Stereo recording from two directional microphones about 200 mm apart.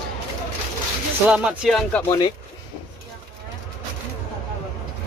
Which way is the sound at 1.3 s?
5° right (ahead or behind).